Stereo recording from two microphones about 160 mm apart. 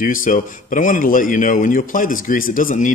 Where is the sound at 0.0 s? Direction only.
60° left (ahead or behind).